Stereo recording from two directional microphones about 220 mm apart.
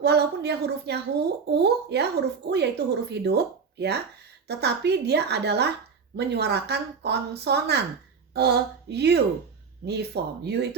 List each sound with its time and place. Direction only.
0.0 s speech: 50° right (ahead or behind)